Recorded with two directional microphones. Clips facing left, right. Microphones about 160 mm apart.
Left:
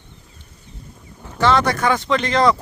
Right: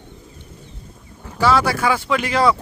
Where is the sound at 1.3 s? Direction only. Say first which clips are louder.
Even; 5° right (ahead or behind).